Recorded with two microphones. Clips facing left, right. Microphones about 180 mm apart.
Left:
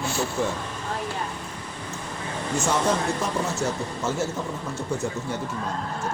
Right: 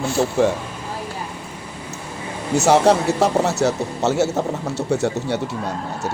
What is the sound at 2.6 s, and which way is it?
A man's voice, 75° right (ahead or behind).